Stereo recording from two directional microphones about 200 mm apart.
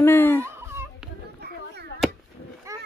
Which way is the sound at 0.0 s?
10° left (ahead or behind).